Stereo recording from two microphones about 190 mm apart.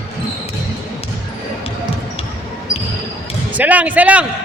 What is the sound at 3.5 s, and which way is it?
Speech, 10° right (ahead or behind).